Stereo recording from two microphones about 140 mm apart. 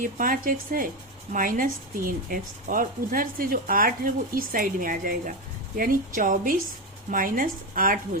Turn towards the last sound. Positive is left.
turn(degrees=-85)